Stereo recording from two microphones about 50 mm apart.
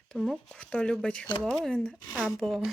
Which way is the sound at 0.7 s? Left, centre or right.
Centre.